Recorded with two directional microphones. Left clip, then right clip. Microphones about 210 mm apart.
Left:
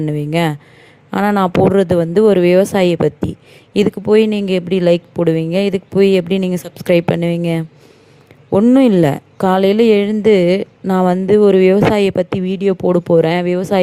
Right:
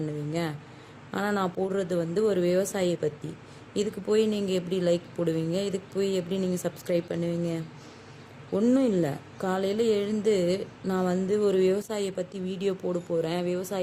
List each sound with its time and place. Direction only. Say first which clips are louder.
0.4 s a woman's voice: left 15 dB; 40° left (ahead or behind)